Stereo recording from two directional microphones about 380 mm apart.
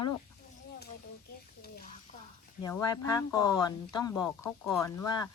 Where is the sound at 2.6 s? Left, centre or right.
Centre.